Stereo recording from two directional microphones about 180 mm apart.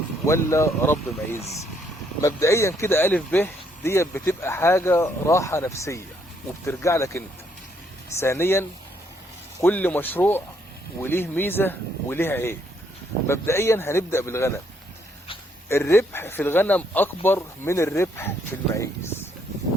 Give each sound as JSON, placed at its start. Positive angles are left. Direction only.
{"t": 0.3, "sound": "speech", "side_deg": 15}
{"t": 2.2, "sound": "speech", "side_deg": 15}
{"t": 15.7, "sound": "speech", "side_deg": 15}